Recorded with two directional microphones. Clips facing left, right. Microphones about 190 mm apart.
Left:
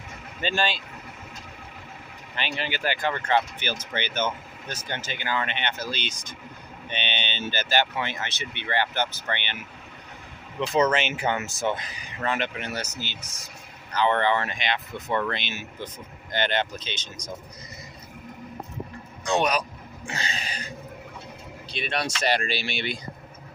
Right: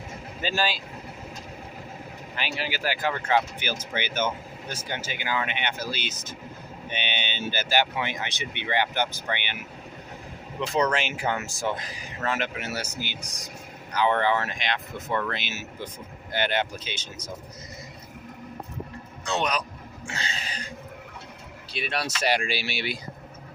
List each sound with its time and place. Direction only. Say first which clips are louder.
0.4 s speech: left 1 dB; 5° right (ahead or behind)
2.3 s speech: left 1 dB; 5° right (ahead or behind)
10.8 s speech: left 3 dB; centre (ahead or behind)
19.2 s a sound: left 4 dB; 15° left (ahead or behind)
21.7 s speech: left 1 dB; 5° right (ahead or behind)